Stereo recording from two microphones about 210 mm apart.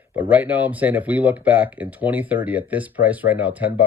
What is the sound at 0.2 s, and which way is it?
Speech, 5° right (ahead or behind).